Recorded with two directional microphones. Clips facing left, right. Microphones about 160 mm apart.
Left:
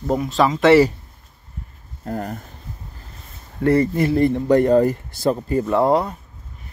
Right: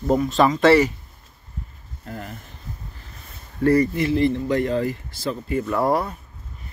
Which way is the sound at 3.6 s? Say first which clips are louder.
Left 1 dB; 25° left (ahead or behind).